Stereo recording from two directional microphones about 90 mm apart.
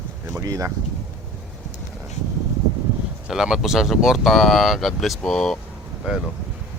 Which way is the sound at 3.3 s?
5° right (ahead or behind).